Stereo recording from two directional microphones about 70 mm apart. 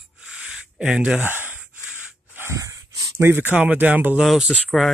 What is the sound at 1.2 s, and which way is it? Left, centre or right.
Speech, right.